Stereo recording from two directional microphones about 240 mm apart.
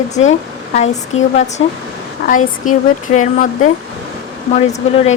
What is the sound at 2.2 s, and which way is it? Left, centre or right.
Speech, left.